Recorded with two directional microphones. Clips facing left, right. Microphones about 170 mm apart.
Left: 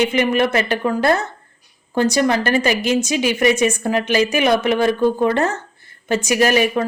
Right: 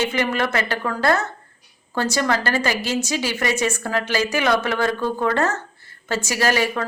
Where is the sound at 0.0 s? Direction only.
20° left (ahead or behind).